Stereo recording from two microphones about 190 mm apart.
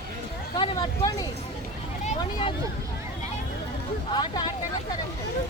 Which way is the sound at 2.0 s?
30° left (ahead or behind).